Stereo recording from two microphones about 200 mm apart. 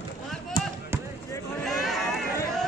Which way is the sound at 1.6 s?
Centre (ahead or behind).